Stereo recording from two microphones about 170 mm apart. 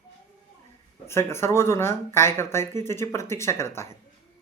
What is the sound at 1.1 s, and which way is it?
Speech, 15° left (ahead or behind).